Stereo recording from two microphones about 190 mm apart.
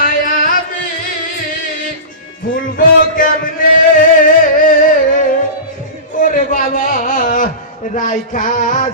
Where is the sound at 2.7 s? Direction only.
45° left (ahead or behind).